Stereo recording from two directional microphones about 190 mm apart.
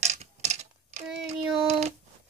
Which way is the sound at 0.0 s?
35° right (ahead or behind).